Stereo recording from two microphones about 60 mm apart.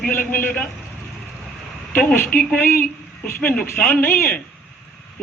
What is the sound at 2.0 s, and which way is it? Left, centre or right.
Speech, left.